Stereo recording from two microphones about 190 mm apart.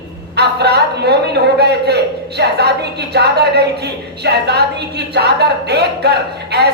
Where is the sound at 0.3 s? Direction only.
60° right (ahead or behind).